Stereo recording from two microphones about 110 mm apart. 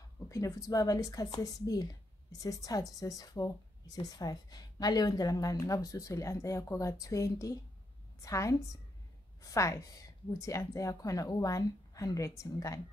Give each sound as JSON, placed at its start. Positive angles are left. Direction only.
{"t": 0.3, "sound": "a woman's voice", "side_deg": 30}